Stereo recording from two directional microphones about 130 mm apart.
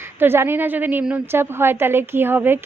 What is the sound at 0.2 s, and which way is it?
A woman's voice, 15° right (ahead or behind).